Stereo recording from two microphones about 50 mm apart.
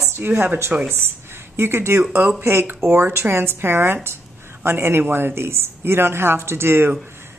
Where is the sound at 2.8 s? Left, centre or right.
Right.